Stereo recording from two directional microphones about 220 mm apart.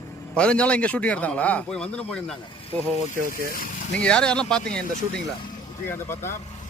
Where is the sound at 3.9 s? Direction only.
5° left (ahead or behind).